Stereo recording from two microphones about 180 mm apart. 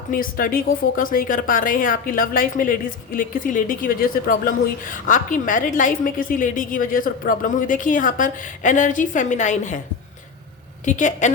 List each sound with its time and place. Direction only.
0.1 s speech: 50° left (ahead or behind)
10.8 s speech: 45° left (ahead or behind)